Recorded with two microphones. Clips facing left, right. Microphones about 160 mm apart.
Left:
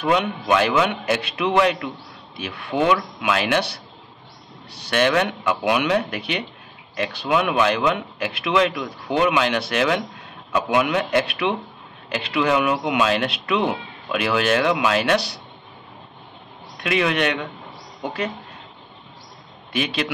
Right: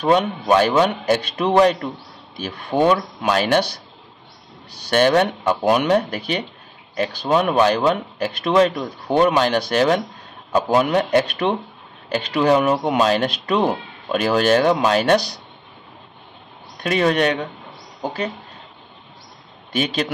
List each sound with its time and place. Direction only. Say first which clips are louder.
0.0 s speech: right 3 dB; 35° right (ahead or behind)
4.8 s speech: right 4 dB; 35° right (ahead or behind)
16.8 s speech: right 3 dB; 40° right (ahead or behind)
19.7 s speech: right 2 dB; 40° right (ahead or behind)